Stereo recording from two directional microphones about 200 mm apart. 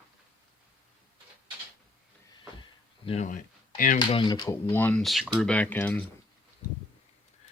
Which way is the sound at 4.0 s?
20° left (ahead or behind).